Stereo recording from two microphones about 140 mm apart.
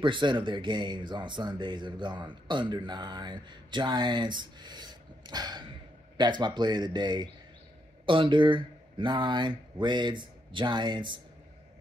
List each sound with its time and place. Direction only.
0.0 s speech: 35° right (ahead or behind)